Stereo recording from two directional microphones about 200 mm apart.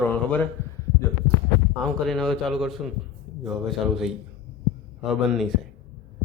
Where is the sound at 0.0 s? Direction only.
10° left (ahead or behind).